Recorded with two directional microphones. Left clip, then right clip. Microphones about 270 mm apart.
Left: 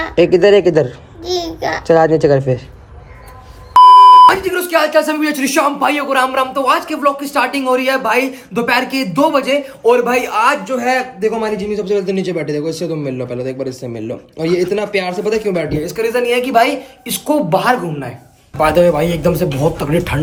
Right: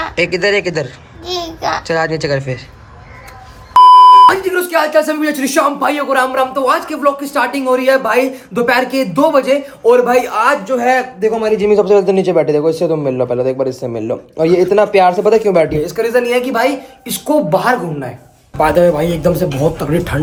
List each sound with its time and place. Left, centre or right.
0.2 s speech: centre
1.2 s babbling: centre
1.9 s speech: centre
3.7 s speech: centre